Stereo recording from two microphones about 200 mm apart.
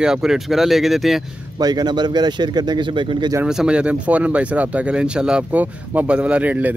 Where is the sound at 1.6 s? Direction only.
20° right (ahead or behind).